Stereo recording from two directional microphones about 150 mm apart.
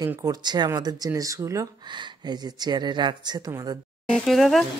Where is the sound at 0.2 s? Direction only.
30° right (ahead or behind).